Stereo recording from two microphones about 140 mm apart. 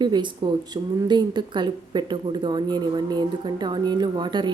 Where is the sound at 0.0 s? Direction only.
30° right (ahead or behind).